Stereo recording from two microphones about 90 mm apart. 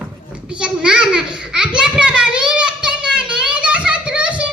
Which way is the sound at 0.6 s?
10° right (ahead or behind).